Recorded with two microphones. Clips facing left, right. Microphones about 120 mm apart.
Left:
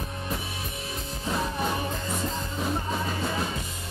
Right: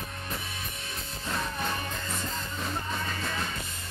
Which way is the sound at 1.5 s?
15° left (ahead or behind).